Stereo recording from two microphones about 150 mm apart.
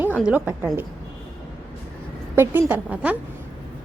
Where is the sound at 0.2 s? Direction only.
10° right (ahead or behind).